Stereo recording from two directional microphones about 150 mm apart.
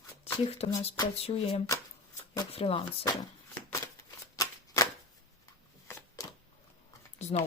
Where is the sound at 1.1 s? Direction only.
40° left (ahead or behind).